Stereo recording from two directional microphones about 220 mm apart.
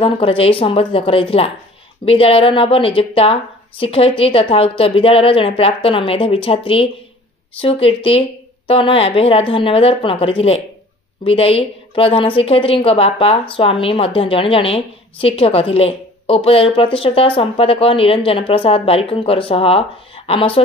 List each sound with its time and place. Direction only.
0.0 s a woman's voice: 25° left (ahead or behind)